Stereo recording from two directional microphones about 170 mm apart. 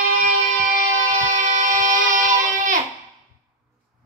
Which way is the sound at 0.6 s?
50° right (ahead or behind).